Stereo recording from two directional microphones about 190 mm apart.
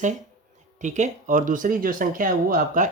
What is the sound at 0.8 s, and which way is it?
Speech, 40° right (ahead or behind).